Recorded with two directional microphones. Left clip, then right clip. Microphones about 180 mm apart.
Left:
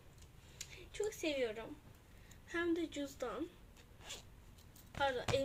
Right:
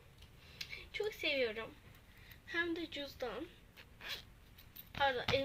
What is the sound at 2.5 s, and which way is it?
Speech, 5° left (ahead or behind).